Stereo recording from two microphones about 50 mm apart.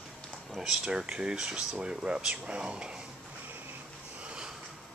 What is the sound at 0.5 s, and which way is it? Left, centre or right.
Speech, centre.